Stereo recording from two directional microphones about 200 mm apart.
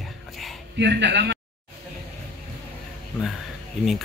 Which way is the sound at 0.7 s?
60° right (ahead or behind).